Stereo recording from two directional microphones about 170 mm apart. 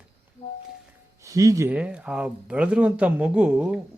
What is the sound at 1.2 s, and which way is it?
Speech, 20° right (ahead or behind).